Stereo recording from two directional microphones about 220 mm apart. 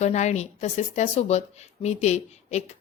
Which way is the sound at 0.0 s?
30° left (ahead or behind).